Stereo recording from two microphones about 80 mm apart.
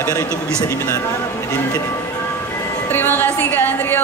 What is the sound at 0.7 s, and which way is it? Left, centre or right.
Speech, left.